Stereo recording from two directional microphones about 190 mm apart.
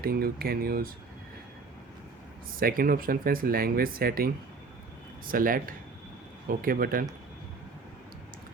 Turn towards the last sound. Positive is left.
turn(degrees=-50)  # may be behind; listen again after turning